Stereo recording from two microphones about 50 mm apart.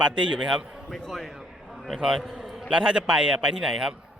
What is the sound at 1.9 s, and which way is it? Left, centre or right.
Speech, centre.